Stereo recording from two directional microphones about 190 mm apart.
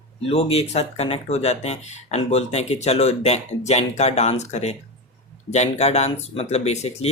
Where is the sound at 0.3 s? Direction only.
30° left (ahead or behind).